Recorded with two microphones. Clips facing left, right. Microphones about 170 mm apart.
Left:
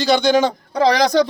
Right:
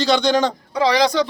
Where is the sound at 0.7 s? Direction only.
45° left (ahead or behind).